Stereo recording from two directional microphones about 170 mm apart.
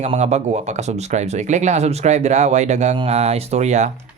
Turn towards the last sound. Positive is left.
turn(degrees=-40)  # may be behind; listen again after turning